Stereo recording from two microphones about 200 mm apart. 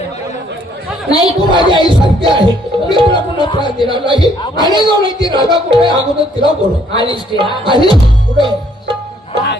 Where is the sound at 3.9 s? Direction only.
25° right (ahead or behind).